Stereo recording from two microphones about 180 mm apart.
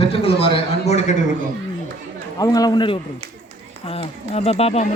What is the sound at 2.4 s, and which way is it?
A man's voice, 20° left (ahead or behind).